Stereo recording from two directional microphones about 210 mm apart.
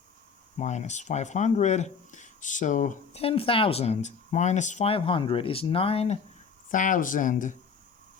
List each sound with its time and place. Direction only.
0.6 s speech: 35° left (ahead or behind)
6.7 s speech: 40° left (ahead or behind)